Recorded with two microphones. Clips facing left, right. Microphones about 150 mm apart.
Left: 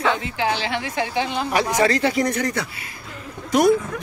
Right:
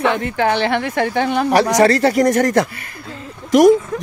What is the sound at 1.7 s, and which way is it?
Speech, 40° right (ahead or behind).